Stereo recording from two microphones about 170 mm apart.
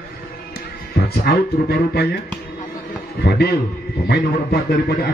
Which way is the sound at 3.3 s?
70° left (ahead or behind).